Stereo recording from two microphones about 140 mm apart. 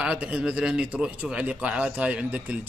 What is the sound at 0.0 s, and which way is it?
A man's voice, 5° right (ahead or behind).